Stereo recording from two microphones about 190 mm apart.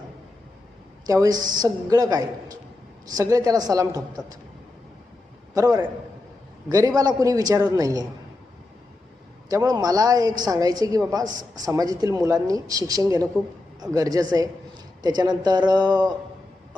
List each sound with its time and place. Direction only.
1.0 s a woman's voice: 20° right (ahead or behind)
5.5 s a woman's voice: 20° right (ahead or behind)
9.5 s a woman's voice: 20° right (ahead or behind)